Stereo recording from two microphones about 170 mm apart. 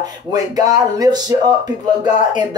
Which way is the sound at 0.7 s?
20° right (ahead or behind).